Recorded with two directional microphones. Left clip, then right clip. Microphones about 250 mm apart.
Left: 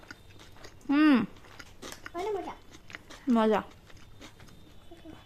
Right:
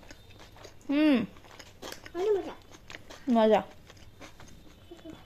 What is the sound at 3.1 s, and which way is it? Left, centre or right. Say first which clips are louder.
Speech: right 3 dB; centre.